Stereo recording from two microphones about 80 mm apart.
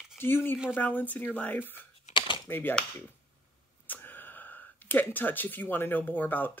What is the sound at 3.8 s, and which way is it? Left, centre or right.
Speech, left.